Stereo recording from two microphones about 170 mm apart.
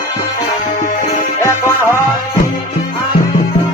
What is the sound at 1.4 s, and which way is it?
Music, 15° left (ahead or behind).